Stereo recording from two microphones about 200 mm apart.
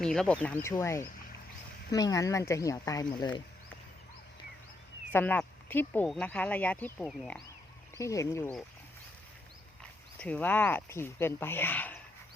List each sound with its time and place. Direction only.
0.0 s speech: 5° left (ahead or behind); by 3.4 s 20° left (ahead or behind)
5.1 s speech: 10° left (ahead or behind)
7.9 s speech: 15° left (ahead or behind)
10.2 s speech: 5° left (ahead or behind)